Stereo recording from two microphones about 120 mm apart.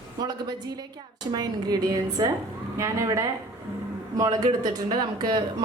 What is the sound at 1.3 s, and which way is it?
A woman's voice, 35° right (ahead or behind).